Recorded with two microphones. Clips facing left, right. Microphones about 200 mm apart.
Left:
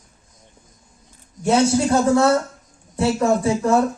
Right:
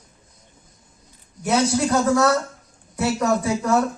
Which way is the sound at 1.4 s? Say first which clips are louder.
Left 3 dB; 25° left (ahead or behind).